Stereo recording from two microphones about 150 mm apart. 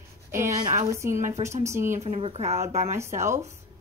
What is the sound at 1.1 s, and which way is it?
Speech, 55° right (ahead or behind).